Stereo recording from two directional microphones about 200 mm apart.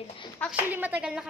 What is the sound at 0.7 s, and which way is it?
Speech, 10° right (ahead or behind).